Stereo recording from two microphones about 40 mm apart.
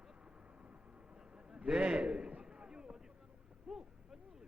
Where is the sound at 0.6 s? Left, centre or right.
Right.